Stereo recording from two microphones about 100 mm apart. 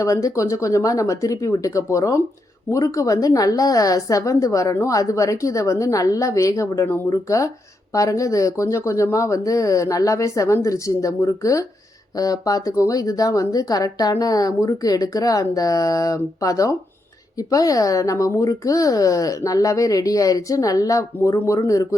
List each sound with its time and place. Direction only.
0.0 s speech: 35° left (ahead or behind)